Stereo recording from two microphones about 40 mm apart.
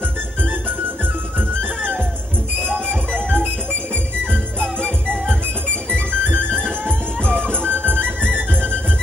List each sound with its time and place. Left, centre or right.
2.9 s music: right
4.3 s jingle bell: right
5.9 s music: right